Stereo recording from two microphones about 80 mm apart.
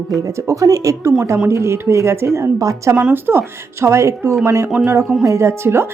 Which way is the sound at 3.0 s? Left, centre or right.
Right.